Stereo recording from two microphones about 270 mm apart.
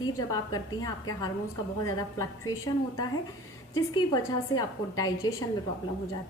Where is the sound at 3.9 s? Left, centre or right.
Centre.